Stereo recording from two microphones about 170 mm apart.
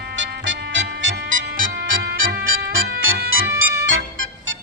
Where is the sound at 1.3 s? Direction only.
50° right (ahead or behind).